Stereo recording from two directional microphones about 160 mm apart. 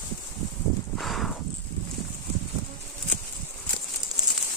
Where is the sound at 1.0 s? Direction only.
Centre (ahead or behind).